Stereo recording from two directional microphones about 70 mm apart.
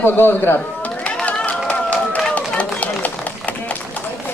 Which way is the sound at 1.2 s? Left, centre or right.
Left.